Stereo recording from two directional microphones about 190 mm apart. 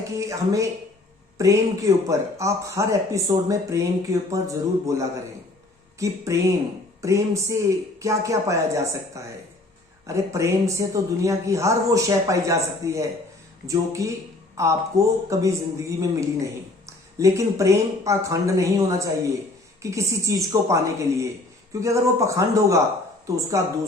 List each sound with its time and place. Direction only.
0.2 s a man's voice: 15° right (ahead or behind)